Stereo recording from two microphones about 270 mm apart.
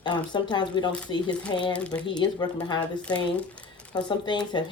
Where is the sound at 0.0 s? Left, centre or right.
Centre.